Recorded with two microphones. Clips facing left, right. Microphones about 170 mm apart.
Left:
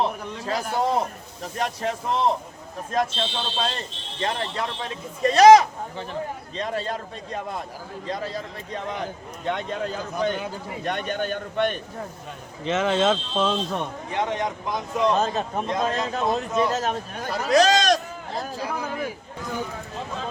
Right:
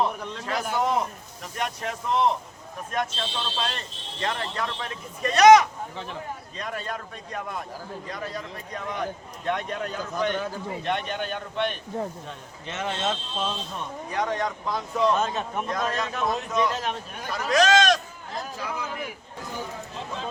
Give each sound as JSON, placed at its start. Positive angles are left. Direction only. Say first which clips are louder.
{"t": 0.4, "sound": "a man's voice", "louder": "left 2 dB", "side_deg": 30}
{"t": 10.8, "sound": "a man's voice", "louder": "left 3 dB", "side_deg": 45}
{"t": 12.6, "sound": "speech", "louder": "left 8 dB", "side_deg": 90}
{"t": 14.1, "sound": "speech", "louder": "left 1 dB", "side_deg": 25}
{"t": 15.1, "sound": "a man's voice", "louder": "left 2 dB", "side_deg": 35}